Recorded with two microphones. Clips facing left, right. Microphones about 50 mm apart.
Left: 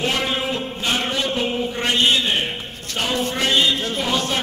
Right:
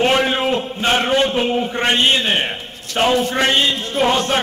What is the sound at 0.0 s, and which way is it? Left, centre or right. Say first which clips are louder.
A man's voice: right 6 dB; right.